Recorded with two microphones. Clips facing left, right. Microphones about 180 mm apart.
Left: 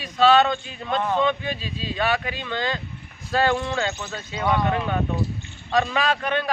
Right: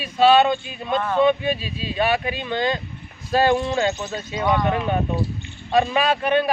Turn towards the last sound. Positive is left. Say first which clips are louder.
# right 4 dB
turn(degrees=-15)  # may be behind; listen again after turning